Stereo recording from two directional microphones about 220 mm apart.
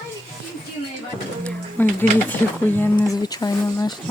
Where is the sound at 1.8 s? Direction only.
10° left (ahead or behind).